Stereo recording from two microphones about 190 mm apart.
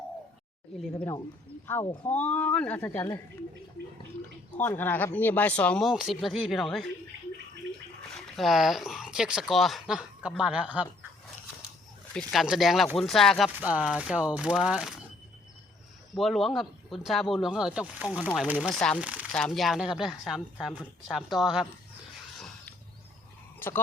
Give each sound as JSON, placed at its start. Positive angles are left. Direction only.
{"t": 1.6, "sound": "speech", "side_deg": 15}
{"t": 4.5, "sound": "speech", "side_deg": 10}
{"t": 8.4, "sound": "speech", "side_deg": 0}
{"t": 12.1, "sound": "speech", "side_deg": 0}
{"t": 16.1, "sound": "speech", "side_deg": 0}
{"t": 18.1, "sound": "speech", "side_deg": 15}
{"t": 18.6, "sound": "speech", "side_deg": 5}
{"t": 19.3, "sound": "speech", "side_deg": 5}
{"t": 23.6, "sound": "speech", "side_deg": 10}